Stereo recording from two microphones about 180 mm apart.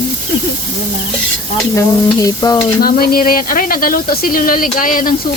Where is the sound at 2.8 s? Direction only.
55° left (ahead or behind).